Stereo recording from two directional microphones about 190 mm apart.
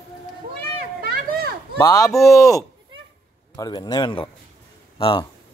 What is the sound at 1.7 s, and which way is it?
A man's voice, 20° left (ahead or behind).